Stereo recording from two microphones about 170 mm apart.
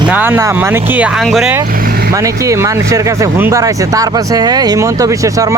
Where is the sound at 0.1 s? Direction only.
10° right (ahead or behind).